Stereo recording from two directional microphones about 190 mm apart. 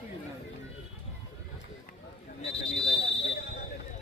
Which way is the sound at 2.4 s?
30° left (ahead or behind).